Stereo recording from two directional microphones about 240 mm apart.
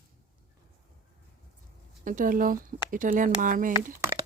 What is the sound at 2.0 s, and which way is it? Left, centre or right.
Speech, right.